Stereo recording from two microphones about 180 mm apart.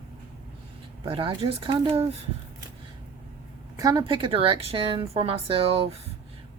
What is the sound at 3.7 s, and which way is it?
Speech, 20° right (ahead or behind).